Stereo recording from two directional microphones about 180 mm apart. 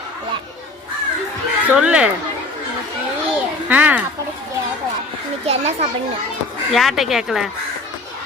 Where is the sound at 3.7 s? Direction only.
10° right (ahead or behind).